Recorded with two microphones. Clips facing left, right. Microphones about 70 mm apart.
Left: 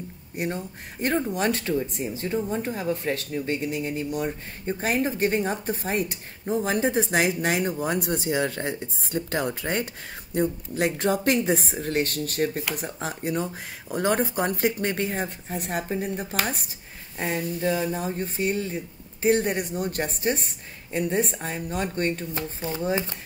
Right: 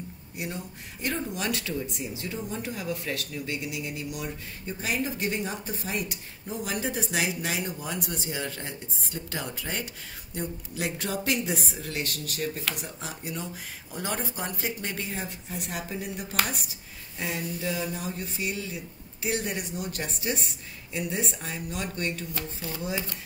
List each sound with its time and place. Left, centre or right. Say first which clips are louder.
0.4 s speech: left 6 dB; left